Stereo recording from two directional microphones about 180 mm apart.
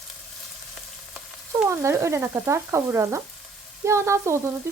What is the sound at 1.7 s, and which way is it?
Frying, 15° right (ahead or behind).